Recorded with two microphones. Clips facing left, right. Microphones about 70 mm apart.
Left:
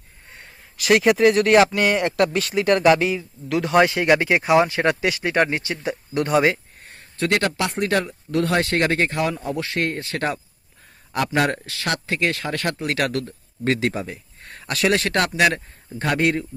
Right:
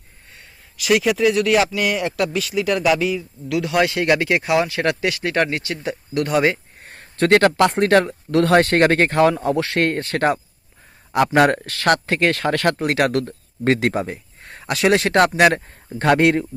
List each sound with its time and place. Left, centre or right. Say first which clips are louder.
0.9 s speech: left 1 dB; left
1.5 s speech: left 2 dB; left
3.0 s speech: right 1 dB; left
7.3 s speech: right 8 dB; right
8.5 s speech: right 7 dB; right
9.2 s speech: right 8 dB; right
10.2 s speech: right 8 dB; right
12.8 s speech: right 5 dB; right
16.0 s speech: right 5 dB; right